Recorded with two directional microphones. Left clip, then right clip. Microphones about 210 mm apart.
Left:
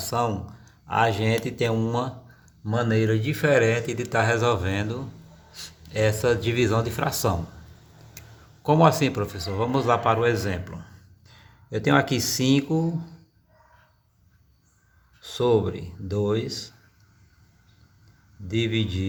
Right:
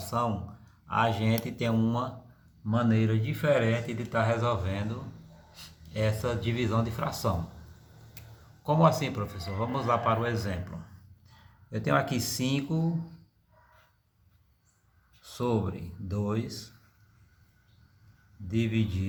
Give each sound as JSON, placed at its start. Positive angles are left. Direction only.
{"t": 0.0, "sound": "a man's voice", "side_deg": 35}
{"t": 8.6, "sound": "a man's voice", "side_deg": 35}
{"t": 15.2, "sound": "speech", "side_deg": 25}
{"t": 18.4, "sound": "speech", "side_deg": 25}